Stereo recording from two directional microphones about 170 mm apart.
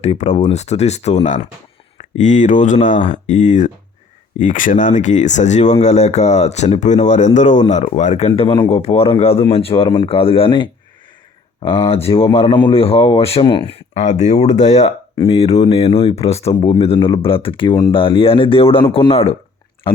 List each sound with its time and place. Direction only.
0.0 s speech: 40° left (ahead or behind)
13.9 s speech: 45° left (ahead or behind)